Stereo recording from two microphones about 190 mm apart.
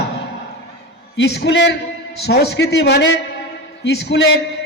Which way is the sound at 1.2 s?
65° left (ahead or behind).